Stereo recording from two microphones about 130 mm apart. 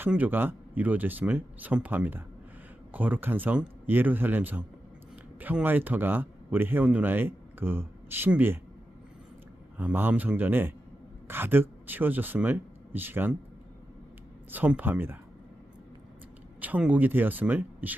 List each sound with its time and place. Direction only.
0.0 s speech: 15° right (ahead or behind)
9.7 s speech: 15° right (ahead or behind)
14.5 s speech: 15° right (ahead or behind)
16.6 s speech: 10° right (ahead or behind)